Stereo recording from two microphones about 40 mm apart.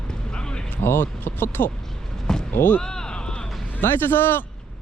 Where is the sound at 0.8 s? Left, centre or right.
Left.